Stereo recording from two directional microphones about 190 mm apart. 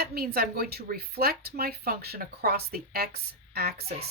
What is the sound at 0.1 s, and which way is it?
Speech, 55° right (ahead or behind).